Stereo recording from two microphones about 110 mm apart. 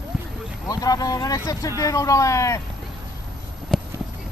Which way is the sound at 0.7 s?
35° left (ahead or behind).